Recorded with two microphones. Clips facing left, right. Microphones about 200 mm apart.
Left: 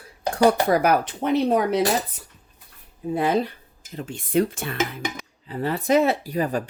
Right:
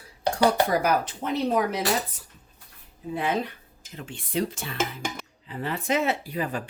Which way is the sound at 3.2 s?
35° left (ahead or behind).